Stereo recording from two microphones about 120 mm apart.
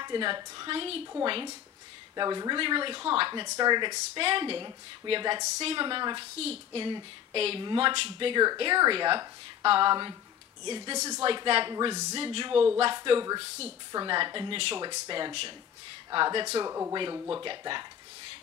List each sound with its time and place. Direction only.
0.0 s speech: 40° right (ahead or behind)
0.7 s a woman's voice: 50° right (ahead or behind)
3.4 s a woman's voice: 35° right (ahead or behind)
6.3 s a woman's voice: 55° right (ahead or behind)
11.7 s speech: 30° right (ahead or behind)
12.2 s a woman's voice: 45° right (ahead or behind)
14.9 s speech: 40° right (ahead or behind)
16.5 s speech: 25° right (ahead or behind)
16.9 s speech: 40° right (ahead or behind)